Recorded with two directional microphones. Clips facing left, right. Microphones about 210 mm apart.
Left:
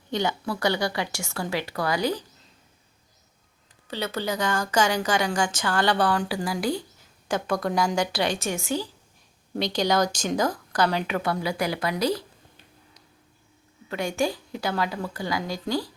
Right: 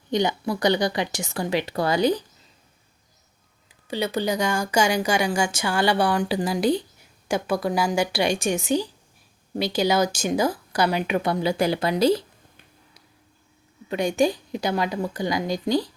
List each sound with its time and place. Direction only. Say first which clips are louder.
0.1 s speech: right 4 dB; 15° right (ahead or behind)
3.8 s a woman's voice: right 4 dB; 15° right (ahead or behind)
7.3 s a woman's voice: right 2 dB; 10° right (ahead or behind)
9.6 s a woman's voice: right 2 dB; 5° right (ahead or behind); by 12.2 s 25° right (ahead or behind)
13.8 s speech: right 5 dB; 20° right (ahead or behind)